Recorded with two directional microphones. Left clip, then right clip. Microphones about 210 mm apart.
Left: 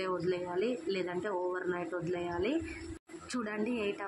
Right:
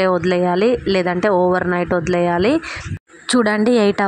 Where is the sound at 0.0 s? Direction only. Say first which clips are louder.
Right 18 dB; 35° right (ahead or behind).